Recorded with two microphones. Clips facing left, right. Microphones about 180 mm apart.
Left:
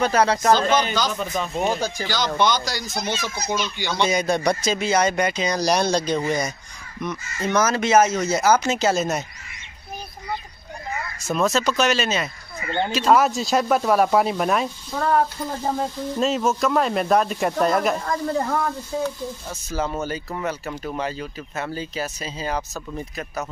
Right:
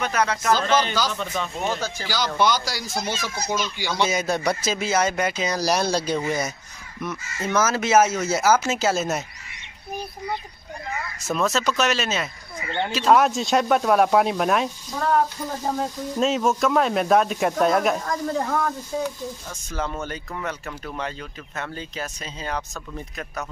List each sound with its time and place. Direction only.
0.0 s speech: 30° left (ahead or behind)
1.1 s speech: 10° left (ahead or behind)
2.0 s speech: 10° right (ahead or behind)
11.2 s speech: centre (ahead or behind)